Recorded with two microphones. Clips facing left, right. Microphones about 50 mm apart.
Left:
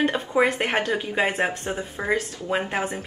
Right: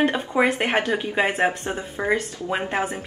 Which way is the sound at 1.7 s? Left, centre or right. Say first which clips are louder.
Right 1 dB; centre.